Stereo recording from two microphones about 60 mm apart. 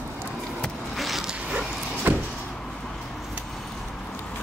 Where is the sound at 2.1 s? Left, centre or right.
Right.